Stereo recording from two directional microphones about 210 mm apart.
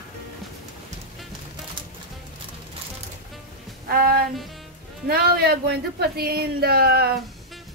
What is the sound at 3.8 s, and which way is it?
Music, 45° right (ahead or behind).